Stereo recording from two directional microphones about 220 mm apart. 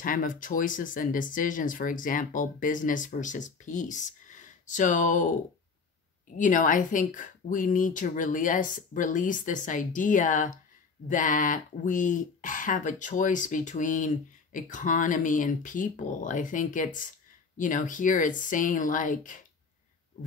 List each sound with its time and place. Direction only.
0.0 s speech: 40° left (ahead or behind)
6.3 s speech: 35° left (ahead or behind)